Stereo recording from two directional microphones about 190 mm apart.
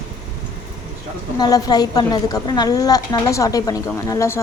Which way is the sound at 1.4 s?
20° left (ahead or behind).